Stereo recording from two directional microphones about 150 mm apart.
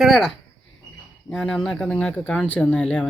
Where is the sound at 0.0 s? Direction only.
Centre (ahead or behind).